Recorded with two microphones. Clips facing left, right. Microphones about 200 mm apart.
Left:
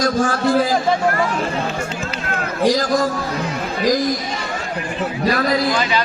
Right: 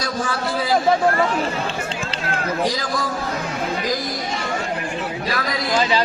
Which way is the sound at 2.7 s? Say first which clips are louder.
Left 7 dB; 45° left (ahead or behind).